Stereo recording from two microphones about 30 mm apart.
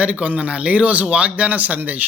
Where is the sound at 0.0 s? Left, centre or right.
Right.